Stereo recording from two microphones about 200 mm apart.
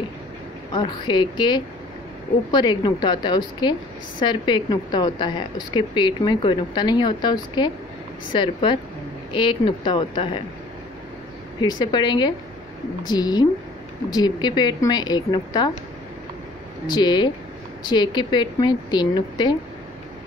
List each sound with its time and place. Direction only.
0.7 s a woman's voice: 25° left (ahead or behind)
11.6 s a woman's voice: 20° left (ahead or behind)
16.9 s a woman's voice: 20° left (ahead or behind)